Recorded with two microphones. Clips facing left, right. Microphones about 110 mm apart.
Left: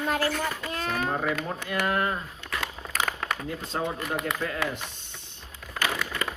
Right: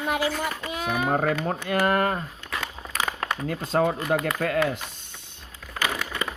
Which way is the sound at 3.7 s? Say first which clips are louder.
Right 8 dB; 70° right (ahead or behind).